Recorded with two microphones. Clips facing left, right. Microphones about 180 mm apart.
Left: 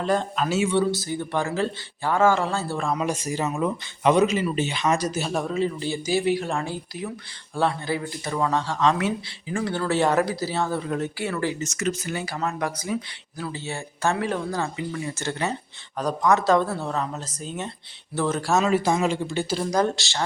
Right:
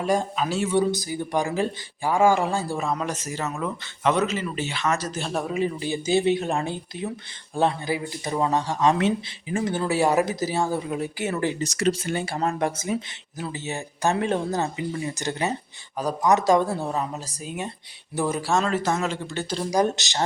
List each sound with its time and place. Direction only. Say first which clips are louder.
0.0 s speech: even; 10° right (ahead or behind)
0.8 s speech: even; 15° right (ahead or behind)
3.0 s speech: left 3 dB; 10° left (ahead or behind)
5.5 s speech: even; 15° right (ahead or behind)
11.6 s speech: right 3 dB; 35° right (ahead or behind); by 18.4 s 10° right (ahead or behind)
18.4 s speech: left 4 dB; 5° left (ahead or behind)
19.7 s speech: right 2 dB; 15° right (ahead or behind)